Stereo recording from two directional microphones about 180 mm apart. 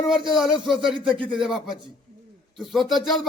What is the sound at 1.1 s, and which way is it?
Speech, 25° right (ahead or behind).